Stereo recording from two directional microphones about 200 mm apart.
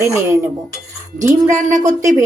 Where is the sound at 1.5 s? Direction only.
35° right (ahead or behind).